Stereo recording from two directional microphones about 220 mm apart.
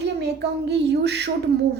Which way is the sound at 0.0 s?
50° right (ahead or behind).